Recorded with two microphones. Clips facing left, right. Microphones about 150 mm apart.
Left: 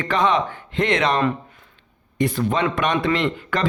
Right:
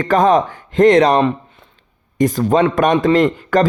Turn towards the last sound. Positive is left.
turn(degrees=-45)  # may be behind; listen again after turning